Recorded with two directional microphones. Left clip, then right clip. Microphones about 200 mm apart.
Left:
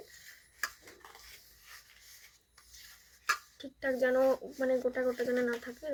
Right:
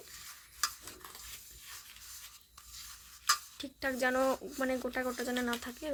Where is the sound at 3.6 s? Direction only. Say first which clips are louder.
Left 2 dB; 65° right (ahead or behind).